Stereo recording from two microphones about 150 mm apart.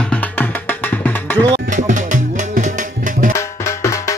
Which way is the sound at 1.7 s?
55° right (ahead or behind).